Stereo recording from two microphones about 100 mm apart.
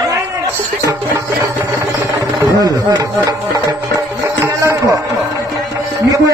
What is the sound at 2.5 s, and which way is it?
Chopping, 45° right (ahead or behind).